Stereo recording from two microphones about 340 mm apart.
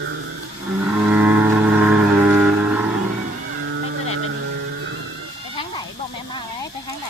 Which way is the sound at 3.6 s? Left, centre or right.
Right.